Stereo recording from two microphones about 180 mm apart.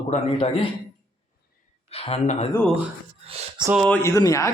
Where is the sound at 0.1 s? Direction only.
35° left (ahead or behind).